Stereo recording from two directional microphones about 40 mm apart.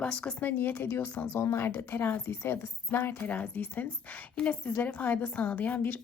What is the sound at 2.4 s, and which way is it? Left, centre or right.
A woman's voice, left.